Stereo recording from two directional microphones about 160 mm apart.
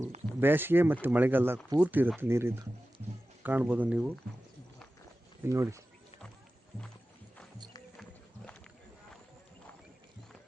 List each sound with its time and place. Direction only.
0.3 s speech: 15° right (ahead or behind)
5.4 s speech: 20° right (ahead or behind)